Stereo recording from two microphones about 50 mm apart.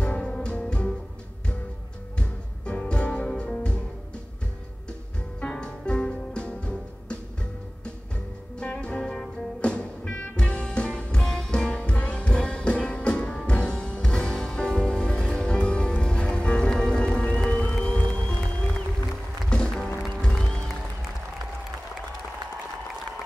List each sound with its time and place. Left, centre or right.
0.0 s music: centre
2.1 s music: left
5.4 s music: centre
8.5 s music: left
19.5 s music: centre